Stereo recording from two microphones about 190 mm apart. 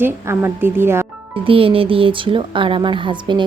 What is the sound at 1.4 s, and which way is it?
Speech, 30° right (ahead or behind).